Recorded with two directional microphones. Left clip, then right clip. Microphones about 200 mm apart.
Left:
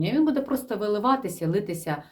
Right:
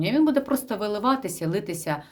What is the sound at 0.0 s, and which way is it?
Speech, 30° right (ahead or behind).